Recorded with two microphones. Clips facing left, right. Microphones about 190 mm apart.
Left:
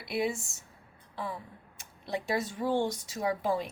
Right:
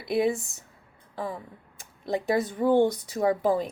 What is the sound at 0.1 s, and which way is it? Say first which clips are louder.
A woman's voice: right 7 dB; 50° right (ahead or behind).